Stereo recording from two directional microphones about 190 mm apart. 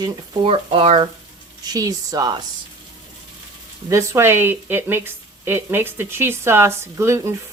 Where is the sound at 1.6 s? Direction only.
20° right (ahead or behind).